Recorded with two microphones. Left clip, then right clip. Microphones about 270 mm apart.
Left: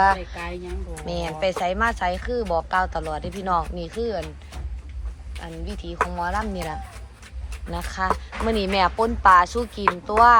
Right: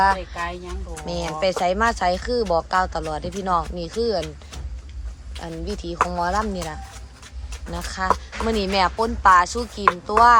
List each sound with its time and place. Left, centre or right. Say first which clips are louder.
0.0 s speech: even; centre
5.4 s speech: right 5 dB; centre
7.7 s speech: right 2 dB; centre